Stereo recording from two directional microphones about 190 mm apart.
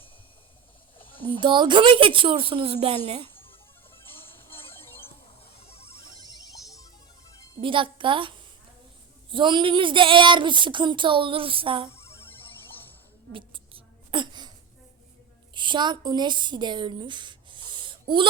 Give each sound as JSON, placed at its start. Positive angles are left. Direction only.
{"t": 1.4, "sound": "speech", "side_deg": -25}
{"t": 5.5, "sound": "music", "side_deg": 30}
{"t": 7.6, "sound": "speech", "side_deg": -25}
{"t": 9.3, "sound": "speech", "side_deg": -25}
{"t": 11.9, "sound": "music", "side_deg": 15}
{"t": 13.3, "sound": "a sound", "side_deg": -25}
{"t": 15.5, "sound": "a woman's voice", "side_deg": -25}